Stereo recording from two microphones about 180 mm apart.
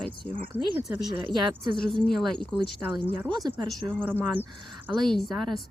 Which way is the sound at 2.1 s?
Centre (ahead or behind).